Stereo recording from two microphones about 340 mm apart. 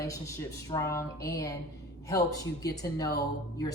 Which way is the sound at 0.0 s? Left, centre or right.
Centre.